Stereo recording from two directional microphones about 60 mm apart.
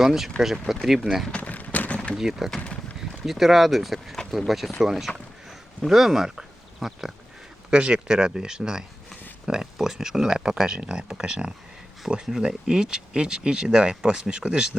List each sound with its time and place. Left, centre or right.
0.0 s speech: centre
1.3 s a sound: left
2.1 s speech: centre